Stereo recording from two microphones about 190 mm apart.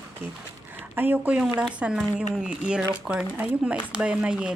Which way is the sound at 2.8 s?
15° right (ahead or behind).